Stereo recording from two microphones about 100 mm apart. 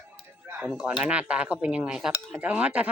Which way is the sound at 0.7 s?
5° right (ahead or behind).